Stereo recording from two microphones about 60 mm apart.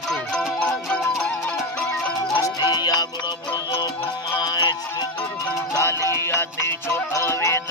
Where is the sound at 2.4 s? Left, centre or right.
Left.